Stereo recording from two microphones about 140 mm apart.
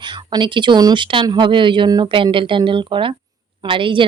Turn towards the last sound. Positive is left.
turn(degrees=-35)  # may be behind; listen again after turning